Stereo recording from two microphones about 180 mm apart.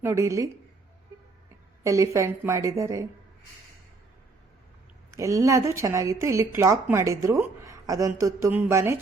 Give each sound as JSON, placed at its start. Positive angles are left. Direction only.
{"t": 0.0, "sound": "a woman's voice", "side_deg": -15}
{"t": 1.8, "sound": "a woman's voice", "side_deg": -15}
{"t": 5.1, "sound": "a woman's voice", "side_deg": -15}